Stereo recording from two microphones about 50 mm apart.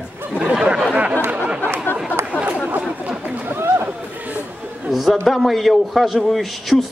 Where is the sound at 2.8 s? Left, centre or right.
Centre.